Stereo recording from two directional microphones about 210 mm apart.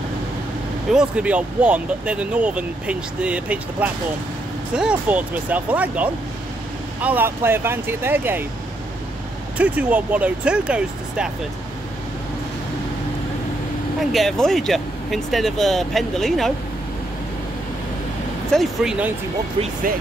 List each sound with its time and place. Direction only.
0.9 s speech: 5° right (ahead or behind)
9.6 s speech: 5° right (ahead or behind)
14.1 s speech: centre (ahead or behind)
18.5 s speech: centre (ahead or behind)
19.6 s speech: 40° right (ahead or behind)